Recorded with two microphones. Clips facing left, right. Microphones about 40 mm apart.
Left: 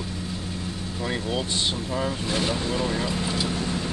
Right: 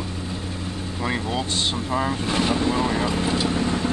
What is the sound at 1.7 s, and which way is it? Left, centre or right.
Speech, right.